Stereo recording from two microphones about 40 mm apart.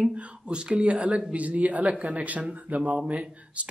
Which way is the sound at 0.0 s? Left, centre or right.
Right.